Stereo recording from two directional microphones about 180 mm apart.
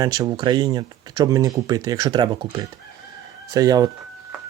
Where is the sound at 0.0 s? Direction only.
20° right (ahead or behind).